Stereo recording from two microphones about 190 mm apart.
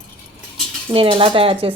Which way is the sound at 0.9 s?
25° right (ahead or behind).